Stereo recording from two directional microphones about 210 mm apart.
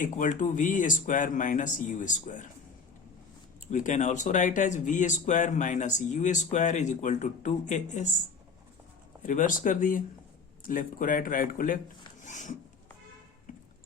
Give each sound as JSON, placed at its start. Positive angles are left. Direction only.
{"t": 0.0, "sound": "speech", "side_deg": 40}
{"t": 3.7, "sound": "speech", "side_deg": 35}
{"t": 9.2, "sound": "speech", "side_deg": 40}